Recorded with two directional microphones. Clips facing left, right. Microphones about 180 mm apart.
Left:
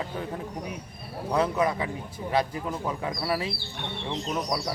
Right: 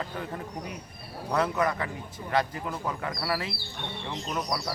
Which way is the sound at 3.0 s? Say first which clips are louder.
Left 2 dB; 15° left (ahead or behind).